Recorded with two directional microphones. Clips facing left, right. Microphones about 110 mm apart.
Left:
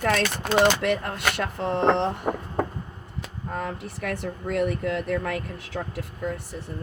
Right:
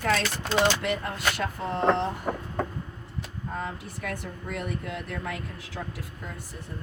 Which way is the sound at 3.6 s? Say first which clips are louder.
Left 4 dB; 55° left (ahead or behind).